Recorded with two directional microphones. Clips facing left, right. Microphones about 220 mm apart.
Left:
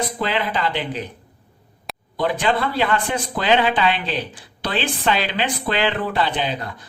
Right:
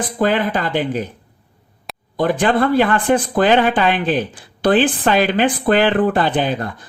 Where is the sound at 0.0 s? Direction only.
50° right (ahead or behind).